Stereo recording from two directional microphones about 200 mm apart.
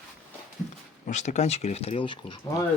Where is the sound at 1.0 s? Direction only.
35° left (ahead or behind).